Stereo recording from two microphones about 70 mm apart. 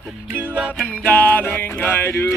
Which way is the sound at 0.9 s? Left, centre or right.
Left.